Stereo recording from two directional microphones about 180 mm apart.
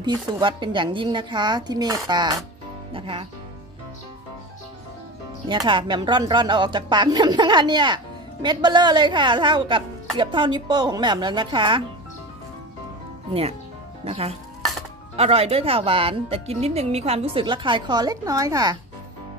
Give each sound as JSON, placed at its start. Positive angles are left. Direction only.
{"t": 0.0, "sound": "speech", "side_deg": -25}
{"t": 5.5, "sound": "speech", "side_deg": -25}
{"t": 13.3, "sound": "speech", "side_deg": -35}